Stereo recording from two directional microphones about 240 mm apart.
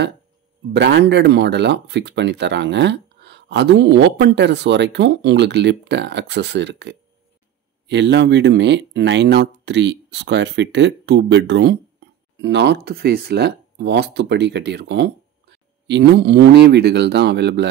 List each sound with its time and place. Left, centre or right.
0.7 s speech: right